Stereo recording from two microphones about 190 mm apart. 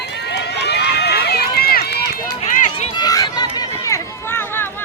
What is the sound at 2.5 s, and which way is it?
Run, 40° left (ahead or behind).